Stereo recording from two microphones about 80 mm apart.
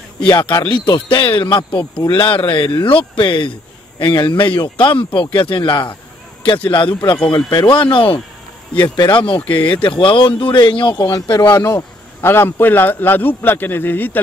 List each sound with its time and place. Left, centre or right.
0.3 s a man's voice: left
2.0 s speech: left
8.7 s speech: left
11.1 s speech: left
11.5 s speech: left
12.2 s a man's voice: left